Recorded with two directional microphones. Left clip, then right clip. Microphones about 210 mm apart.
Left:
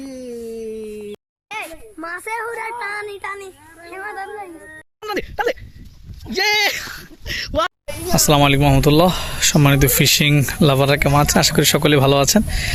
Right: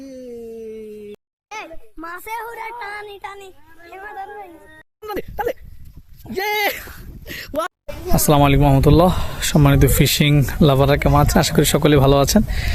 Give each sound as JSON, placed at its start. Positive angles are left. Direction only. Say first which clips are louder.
{"t": 0.0, "sound": "a sound", "louder": "left 3 dB", "side_deg": 40}
{"t": 1.5, "sound": "children playing", "louder": "left 3 dB", "side_deg": -45}
{"t": 4.9, "sound": "speech", "louder": "left 3 dB", "side_deg": -5}